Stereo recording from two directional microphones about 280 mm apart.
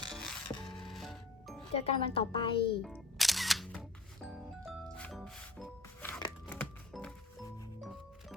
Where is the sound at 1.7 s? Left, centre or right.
Left.